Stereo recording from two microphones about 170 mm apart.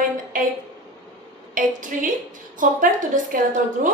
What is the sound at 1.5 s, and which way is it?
A woman's voice, 50° right (ahead or behind).